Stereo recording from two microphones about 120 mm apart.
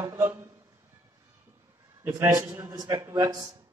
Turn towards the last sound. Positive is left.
turn(degrees=-30)  # may be behind; listen again after turning